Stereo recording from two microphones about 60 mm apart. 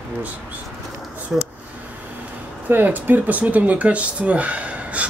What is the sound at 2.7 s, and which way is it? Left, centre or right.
Speech, right.